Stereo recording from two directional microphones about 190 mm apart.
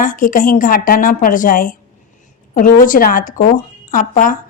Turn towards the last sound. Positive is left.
turn(degrees=45)  # may be behind; listen again after turning